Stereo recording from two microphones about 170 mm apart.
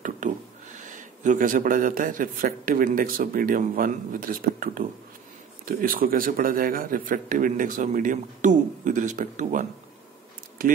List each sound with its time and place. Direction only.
0.7 s a man's voice: 50° right (ahead or behind)